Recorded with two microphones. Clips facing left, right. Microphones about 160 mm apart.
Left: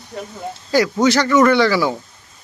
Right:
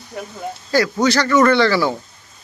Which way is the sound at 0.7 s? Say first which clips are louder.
Left 1 dB; 15° left (ahead or behind).